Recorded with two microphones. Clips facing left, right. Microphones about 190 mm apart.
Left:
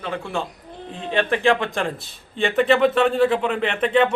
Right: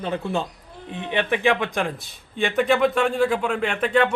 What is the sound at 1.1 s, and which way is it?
A man's voice, 10° right (ahead or behind).